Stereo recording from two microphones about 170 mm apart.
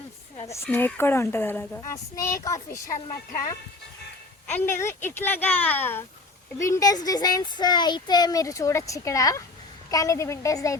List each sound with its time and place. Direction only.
0.4 s a woman's voice: 15° left (ahead or behind)